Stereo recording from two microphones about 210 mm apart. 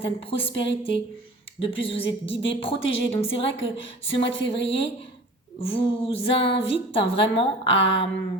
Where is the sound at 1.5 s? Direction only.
25° left (ahead or behind).